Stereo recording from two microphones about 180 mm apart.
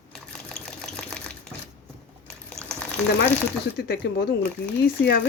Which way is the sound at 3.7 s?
65° left (ahead or behind).